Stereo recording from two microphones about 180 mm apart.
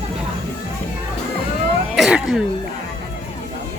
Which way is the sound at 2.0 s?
5° right (ahead or behind).